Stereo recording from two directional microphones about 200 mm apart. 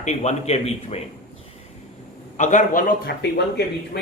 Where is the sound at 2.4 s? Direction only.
40° left (ahead or behind).